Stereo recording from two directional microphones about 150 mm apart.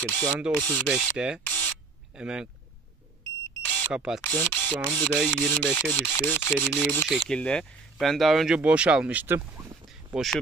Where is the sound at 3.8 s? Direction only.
5° right (ahead or behind).